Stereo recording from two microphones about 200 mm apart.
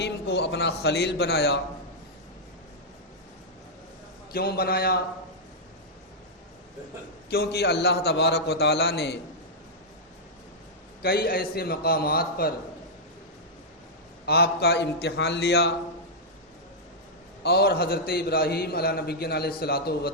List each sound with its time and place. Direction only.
0.0 s speech: 55° left (ahead or behind)
4.3 s a man's voice: 50° left (ahead or behind)
7.3 s a man's voice: 55° left (ahead or behind)
11.0 s a man's voice: 50° left (ahead or behind)
14.3 s a man's voice: 50° left (ahead or behind)
17.4 s a man's voice: 50° left (ahead or behind)